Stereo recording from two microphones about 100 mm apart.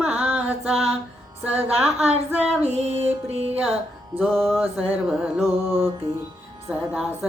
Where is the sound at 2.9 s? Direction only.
90° right.